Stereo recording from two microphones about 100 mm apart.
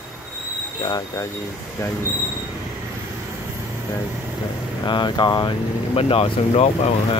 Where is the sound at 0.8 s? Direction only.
40° left (ahead or behind).